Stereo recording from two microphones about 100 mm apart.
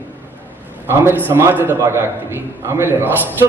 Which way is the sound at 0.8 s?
25° right (ahead or behind).